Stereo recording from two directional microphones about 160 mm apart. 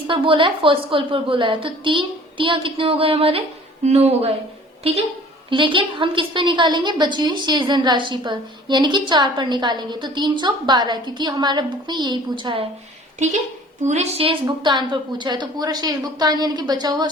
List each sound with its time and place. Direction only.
0.1 s a woman's voice: 30° right (ahead or behind)
5.5 s a woman's voice: 30° right (ahead or behind)
13.8 s a woman's voice: 45° right (ahead or behind)
14.4 s a woman's voice: 30° right (ahead or behind)